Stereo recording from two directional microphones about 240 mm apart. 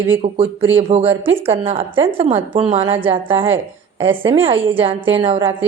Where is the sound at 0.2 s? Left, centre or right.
Right.